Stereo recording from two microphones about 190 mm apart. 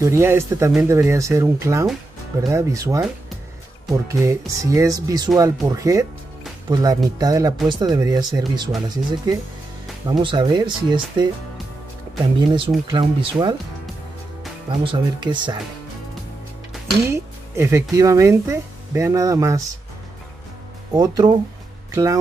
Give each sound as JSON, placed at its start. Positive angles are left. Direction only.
{"t": 0.0, "sound": "speech", "side_deg": -15}
{"t": 12.4, "sound": "speech", "side_deg": -25}
{"t": 14.7, "sound": "speech", "side_deg": -25}
{"t": 17.0, "sound": "speech", "side_deg": -15}
{"t": 20.9, "sound": "speech", "side_deg": -20}